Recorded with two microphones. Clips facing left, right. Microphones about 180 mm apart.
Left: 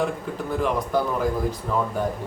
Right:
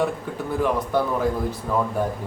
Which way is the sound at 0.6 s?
Centre (ahead or behind).